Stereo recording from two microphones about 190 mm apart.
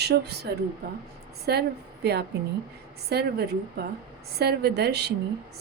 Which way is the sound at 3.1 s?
60° right (ahead or behind).